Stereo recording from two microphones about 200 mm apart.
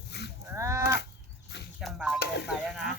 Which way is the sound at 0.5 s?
15° right (ahead or behind).